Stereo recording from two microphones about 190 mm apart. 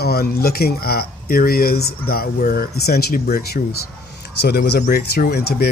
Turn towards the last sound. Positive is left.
turn(degrees=55)  # may be behind; listen again after turning